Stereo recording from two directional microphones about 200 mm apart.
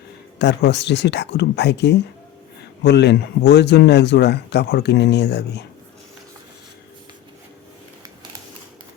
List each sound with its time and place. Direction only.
0.3 s speech: 60° left (ahead or behind)